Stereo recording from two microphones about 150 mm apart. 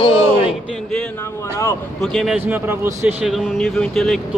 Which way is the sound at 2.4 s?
15° right (ahead or behind).